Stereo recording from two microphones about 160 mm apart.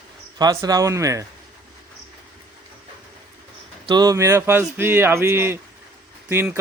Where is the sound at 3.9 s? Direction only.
25° right (ahead or behind).